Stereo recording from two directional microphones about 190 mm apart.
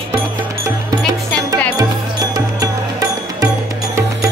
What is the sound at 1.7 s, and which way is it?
Music, 20° right (ahead or behind).